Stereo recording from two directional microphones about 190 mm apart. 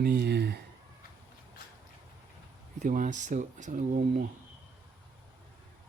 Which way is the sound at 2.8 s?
45° right (ahead or behind).